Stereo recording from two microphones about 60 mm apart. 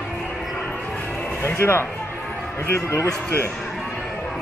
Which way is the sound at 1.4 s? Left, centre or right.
Left.